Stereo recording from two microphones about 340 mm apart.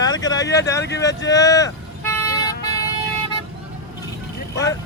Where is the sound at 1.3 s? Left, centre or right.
Centre.